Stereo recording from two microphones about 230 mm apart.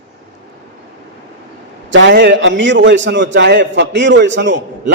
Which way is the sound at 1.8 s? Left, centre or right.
Right.